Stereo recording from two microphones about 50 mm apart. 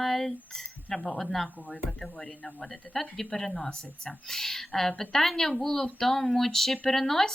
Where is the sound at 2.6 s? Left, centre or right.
Centre.